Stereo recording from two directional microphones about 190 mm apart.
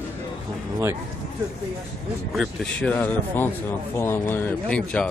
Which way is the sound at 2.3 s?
Centre (ahead or behind).